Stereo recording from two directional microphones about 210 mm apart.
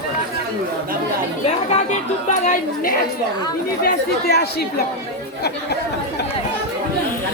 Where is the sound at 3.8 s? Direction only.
50° left (ahead or behind).